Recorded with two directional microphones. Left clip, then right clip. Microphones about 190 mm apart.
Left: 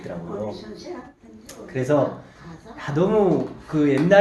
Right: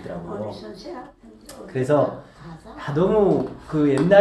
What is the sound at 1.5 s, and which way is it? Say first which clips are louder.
Speech: right 1 dB; centre (ahead or behind).